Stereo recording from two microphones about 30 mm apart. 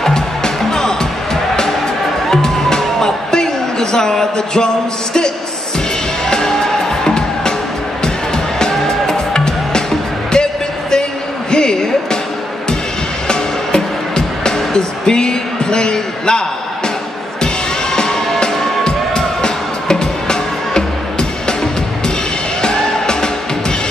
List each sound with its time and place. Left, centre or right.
0.1 s music: centre
7.1 s music: left
8.8 s music: centre
10.3 s a sound: left
13.3 s music: left
18.9 s music: left